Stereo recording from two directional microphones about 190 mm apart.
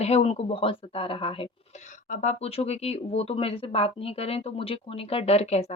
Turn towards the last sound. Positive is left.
turn(degrees=35)  # may be behind; listen again after turning